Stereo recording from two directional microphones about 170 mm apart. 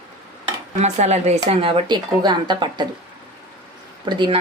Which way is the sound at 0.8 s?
40° right (ahead or behind).